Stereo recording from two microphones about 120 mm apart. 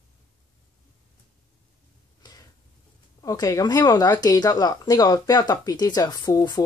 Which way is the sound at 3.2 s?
30° left (ahead or behind).